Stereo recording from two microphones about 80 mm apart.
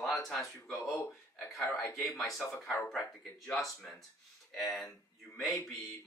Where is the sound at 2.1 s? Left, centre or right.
Centre.